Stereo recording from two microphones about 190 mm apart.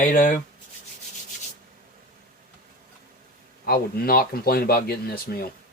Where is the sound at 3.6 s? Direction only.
55° left (ahead or behind).